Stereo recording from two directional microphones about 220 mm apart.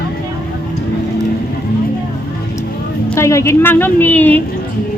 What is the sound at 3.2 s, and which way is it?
A woman's voice, 15° left (ahead or behind).